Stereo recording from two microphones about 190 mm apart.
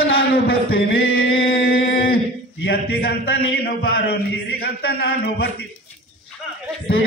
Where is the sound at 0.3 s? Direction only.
55° left (ahead or behind).